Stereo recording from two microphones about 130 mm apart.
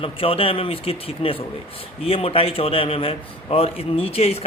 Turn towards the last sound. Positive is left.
turn(degrees=50)  # may be behind; listen again after turning